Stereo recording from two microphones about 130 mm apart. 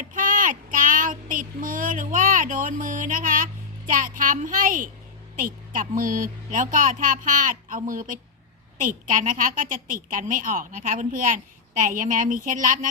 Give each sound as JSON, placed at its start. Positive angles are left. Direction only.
{"t": 0.1, "sound": "child singing", "side_deg": -90}
{"t": 3.8, "sound": "a woman's voice", "side_deg": -90}